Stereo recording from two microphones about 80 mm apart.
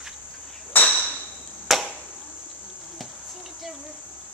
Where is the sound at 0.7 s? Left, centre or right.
Left.